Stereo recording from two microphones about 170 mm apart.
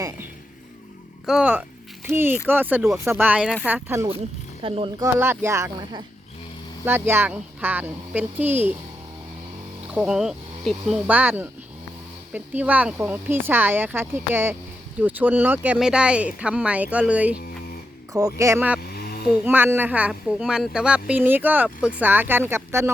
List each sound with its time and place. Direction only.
1.3 s speech: 5° right (ahead or behind)
4.6 s speech: 30° right (ahead or behind)
5.0 s speech: 15° right (ahead or behind)
9.9 s speech: 5° right (ahead or behind)
18.1 s speech: 20° right (ahead or behind)
18.9 s a sound: 65° left (ahead or behind)
19.3 s speech: 10° right (ahead or behind)